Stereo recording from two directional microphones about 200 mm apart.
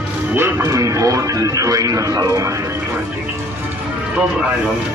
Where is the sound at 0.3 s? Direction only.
10° right (ahead or behind).